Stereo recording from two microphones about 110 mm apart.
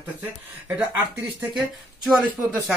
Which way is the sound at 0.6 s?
15° right (ahead or behind).